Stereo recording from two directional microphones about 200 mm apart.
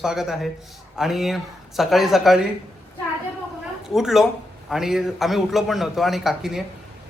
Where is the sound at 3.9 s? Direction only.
Centre (ahead or behind).